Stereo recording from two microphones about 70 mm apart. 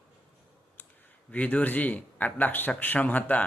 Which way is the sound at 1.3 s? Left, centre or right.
Left.